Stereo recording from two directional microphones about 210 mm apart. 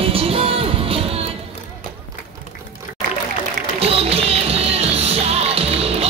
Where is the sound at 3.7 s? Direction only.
30° right (ahead or behind).